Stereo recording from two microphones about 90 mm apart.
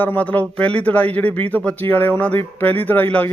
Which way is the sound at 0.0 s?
20° left (ahead or behind).